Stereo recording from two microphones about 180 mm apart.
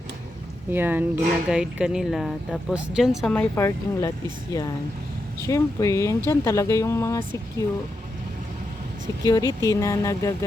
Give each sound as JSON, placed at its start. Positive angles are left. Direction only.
{"t": 0.7, "sound": "speech", "side_deg": -10}
{"t": 3.3, "sound": "speech", "side_deg": 10}
{"t": 5.5, "sound": "speech", "side_deg": 15}
{"t": 9.2, "sound": "speech", "side_deg": 20}